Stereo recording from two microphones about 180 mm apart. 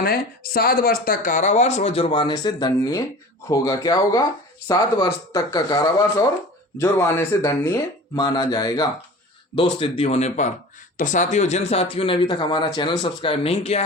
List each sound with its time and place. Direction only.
0.0 s speech: 55° left (ahead or behind); by 13.8 s 35° left (ahead or behind)